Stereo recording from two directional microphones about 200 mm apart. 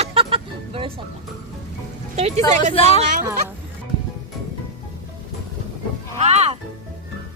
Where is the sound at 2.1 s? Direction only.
35° right (ahead or behind).